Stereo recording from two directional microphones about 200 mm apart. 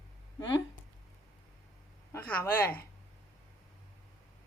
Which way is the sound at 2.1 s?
10° left (ahead or behind).